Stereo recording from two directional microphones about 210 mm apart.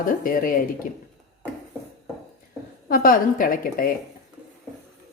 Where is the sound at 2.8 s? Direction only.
45° left (ahead or behind).